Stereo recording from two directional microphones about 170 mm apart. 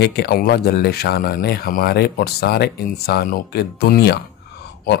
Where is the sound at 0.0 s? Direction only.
70° left (ahead or behind).